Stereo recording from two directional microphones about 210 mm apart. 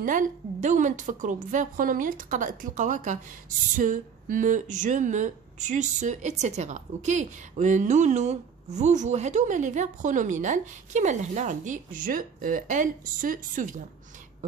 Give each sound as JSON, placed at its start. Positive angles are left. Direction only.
{"t": 0.0, "sound": "a woman's voice", "side_deg": -40}